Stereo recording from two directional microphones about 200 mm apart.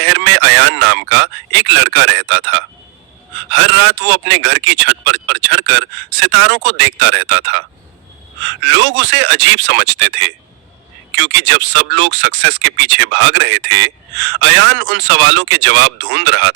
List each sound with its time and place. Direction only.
0.0 s speech: 60° right (ahead or behind)
8.6 s speech: 60° right (ahead or behind)